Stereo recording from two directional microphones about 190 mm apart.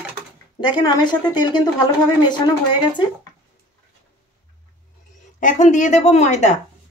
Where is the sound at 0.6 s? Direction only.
20° left (ahead or behind).